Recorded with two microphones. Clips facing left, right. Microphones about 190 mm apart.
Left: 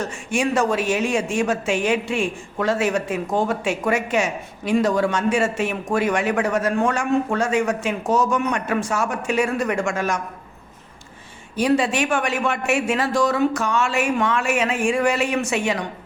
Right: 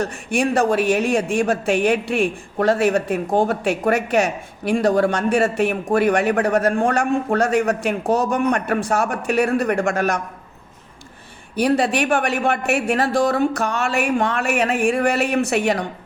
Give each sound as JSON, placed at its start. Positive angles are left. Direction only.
{"t": 0.0, "sound": "a man's voice", "side_deg": -60}
{"t": 11.5, "sound": "a man's voice", "side_deg": -60}